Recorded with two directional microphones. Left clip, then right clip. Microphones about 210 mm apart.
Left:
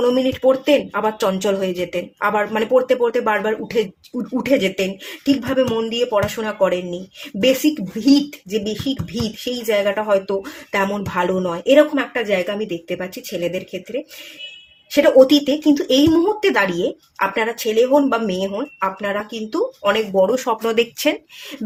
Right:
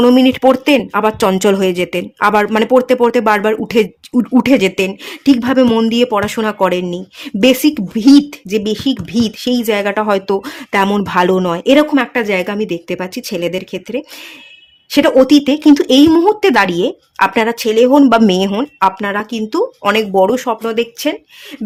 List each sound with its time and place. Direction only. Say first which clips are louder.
0.0 s speech: right 6 dB; 45° right (ahead or behind)
15.2 s speech: right 3 dB; 35° right (ahead or behind); by 20.2 s 50° right (ahead or behind)
20.2 s speech: right 4 dB; 30° right (ahead or behind)
20.6 s speech: right 1 dB; 15° right (ahead or behind)